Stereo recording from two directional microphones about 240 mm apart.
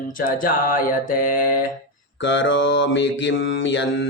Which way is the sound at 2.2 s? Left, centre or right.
Left.